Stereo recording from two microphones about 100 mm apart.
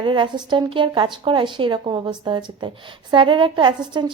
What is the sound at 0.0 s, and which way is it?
A woman's voice, 55° right (ahead or behind).